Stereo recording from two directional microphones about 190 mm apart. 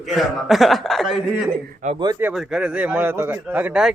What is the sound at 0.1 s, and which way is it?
A man's voice, centre (ahead or behind).